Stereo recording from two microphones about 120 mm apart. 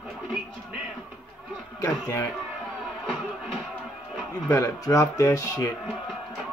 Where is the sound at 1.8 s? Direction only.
25° left (ahead or behind).